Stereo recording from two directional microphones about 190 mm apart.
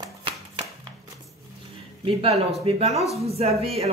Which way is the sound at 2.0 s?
30° right (ahead or behind).